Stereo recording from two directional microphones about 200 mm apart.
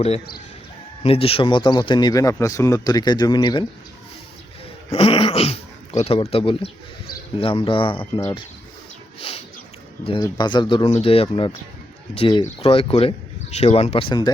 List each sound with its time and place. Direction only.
1.0 s speech: 30° left (ahead or behind)
4.9 s speech: 30° left (ahead or behind)